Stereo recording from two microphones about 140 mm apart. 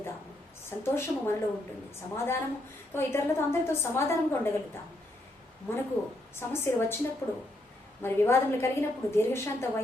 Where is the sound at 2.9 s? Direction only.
15° left (ahead or behind).